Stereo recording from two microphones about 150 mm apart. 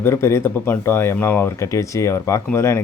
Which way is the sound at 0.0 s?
15° left (ahead or behind).